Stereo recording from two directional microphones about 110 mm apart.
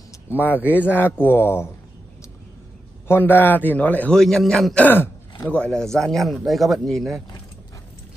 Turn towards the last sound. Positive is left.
turn(degrees=0)  # may be behind; listen again after turning